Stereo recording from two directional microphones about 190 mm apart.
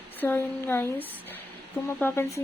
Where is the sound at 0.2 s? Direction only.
10° left (ahead or behind).